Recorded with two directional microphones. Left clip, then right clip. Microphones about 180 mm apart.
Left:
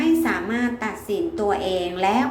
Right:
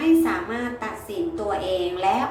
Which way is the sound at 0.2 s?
35° left (ahead or behind).